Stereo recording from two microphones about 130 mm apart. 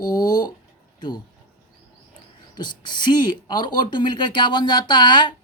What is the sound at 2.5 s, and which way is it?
Speech, 35° left (ahead or behind).